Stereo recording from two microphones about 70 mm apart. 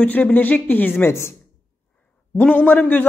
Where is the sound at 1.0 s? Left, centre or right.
Left.